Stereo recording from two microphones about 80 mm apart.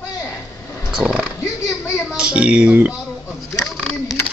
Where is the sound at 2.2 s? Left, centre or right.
Centre.